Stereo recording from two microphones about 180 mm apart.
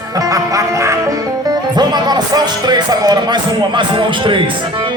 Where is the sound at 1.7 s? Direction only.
25° right (ahead or behind).